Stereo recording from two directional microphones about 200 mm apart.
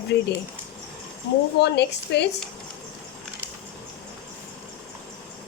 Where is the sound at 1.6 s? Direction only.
60° left (ahead or behind).